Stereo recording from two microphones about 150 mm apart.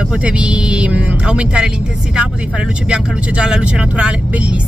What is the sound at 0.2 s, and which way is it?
Speech, 5° right (ahead or behind).